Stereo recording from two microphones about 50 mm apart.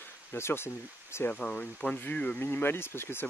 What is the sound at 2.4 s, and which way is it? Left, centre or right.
Speech, left.